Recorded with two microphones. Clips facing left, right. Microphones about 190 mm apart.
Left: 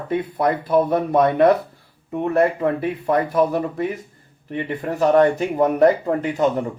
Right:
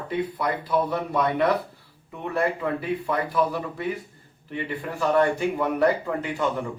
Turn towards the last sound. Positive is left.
turn(degrees=40)  # may be behind; listen again after turning